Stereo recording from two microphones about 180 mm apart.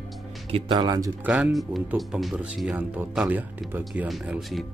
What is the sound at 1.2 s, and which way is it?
Speech, 5° right (ahead or behind).